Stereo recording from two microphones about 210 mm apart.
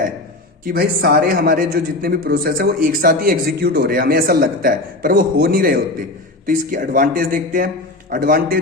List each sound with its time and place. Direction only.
0.6 s a man's voice: 45° right (ahead or behind)